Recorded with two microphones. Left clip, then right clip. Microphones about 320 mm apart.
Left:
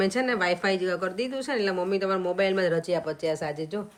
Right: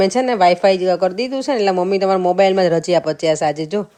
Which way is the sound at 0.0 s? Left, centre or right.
Centre.